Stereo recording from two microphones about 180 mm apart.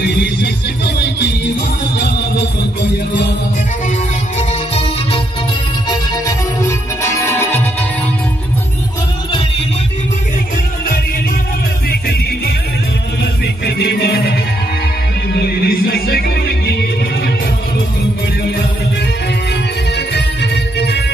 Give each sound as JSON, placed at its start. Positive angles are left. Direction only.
{"t": 0.0, "sound": "music", "side_deg": 70}
{"t": 4.4, "sound": "music", "side_deg": 35}
{"t": 7.0, "sound": "music", "side_deg": 15}
{"t": 11.9, "sound": "music", "side_deg": 60}
{"t": 20.2, "sound": "music", "side_deg": 70}